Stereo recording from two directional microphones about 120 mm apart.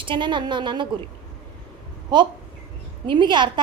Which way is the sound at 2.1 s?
40° right (ahead or behind).